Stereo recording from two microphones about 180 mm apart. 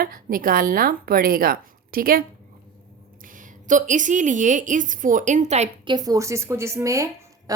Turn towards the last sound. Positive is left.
turn(degrees=-15)  # may be behind; listen again after turning